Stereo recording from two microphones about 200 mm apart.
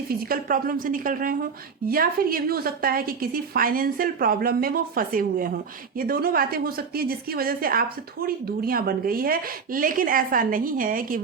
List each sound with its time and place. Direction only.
0.1 s a woman's voice: 45° right (ahead or behind)